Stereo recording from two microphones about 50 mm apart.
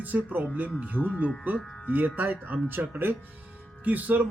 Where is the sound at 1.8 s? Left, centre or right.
Right.